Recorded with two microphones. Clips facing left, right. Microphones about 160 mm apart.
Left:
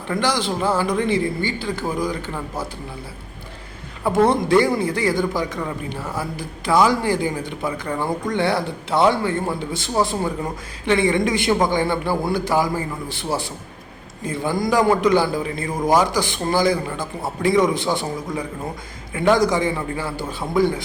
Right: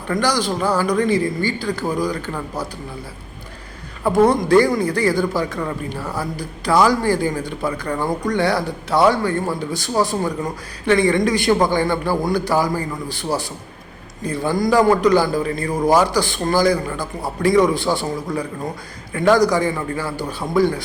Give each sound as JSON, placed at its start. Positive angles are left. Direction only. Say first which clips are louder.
{"t": 0.1, "sound": "a man's voice", "louder": "right 2 dB", "side_deg": 25}
{"t": 1.0, "sound": "a woman's voice", "louder": "right 2 dB", "side_deg": -45}
{"t": 1.5, "sound": "a man's voice", "louder": "right 3 dB", "side_deg": 20}
{"t": 4.0, "sound": "a man's voice", "louder": "right 2 dB", "side_deg": 20}
{"t": 14.3, "sound": "a man's voice", "louder": "right 3 dB", "side_deg": 20}